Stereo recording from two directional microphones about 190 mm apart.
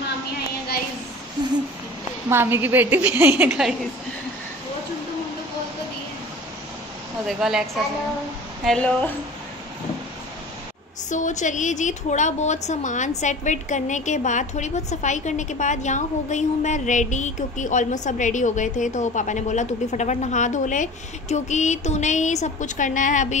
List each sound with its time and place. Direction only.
2.2 s a woman's voice: 10° right (ahead or behind)
7.2 s a woman's voice: 5° right (ahead or behind)
8.6 s a woman's voice: 5° left (ahead or behind)
11.1 s a woman's voice: 40° left (ahead or behind)